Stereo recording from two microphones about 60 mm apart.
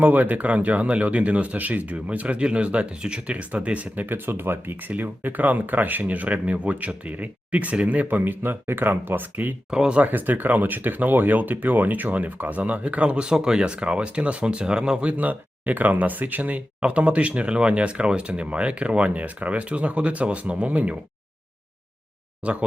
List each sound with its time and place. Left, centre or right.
0.0 s speech: right
9.6 s speech: centre
10.0 s speech: right; by 15.1 s centre
15.2 s speech: right
22.4 s speech: right